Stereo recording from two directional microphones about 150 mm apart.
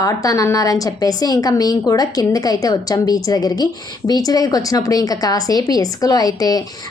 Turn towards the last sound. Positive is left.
turn(degrees=25)  # may be behind; listen again after turning